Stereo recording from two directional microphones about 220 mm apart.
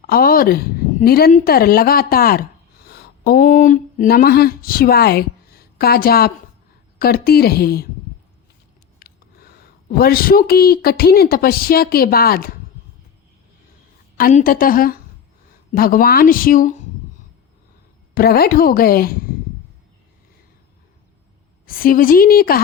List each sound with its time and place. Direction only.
0.1 s a woman's voice: 40° left (ahead or behind)
9.0 s speech: 45° left (ahead or behind)
14.2 s speech: 40° left (ahead or behind)
18.1 s speech: 45° left (ahead or behind)
21.7 s speech: 40° left (ahead or behind)